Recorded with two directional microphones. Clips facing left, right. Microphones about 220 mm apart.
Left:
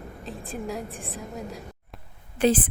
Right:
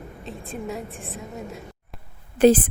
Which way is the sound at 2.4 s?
45° right (ahead or behind).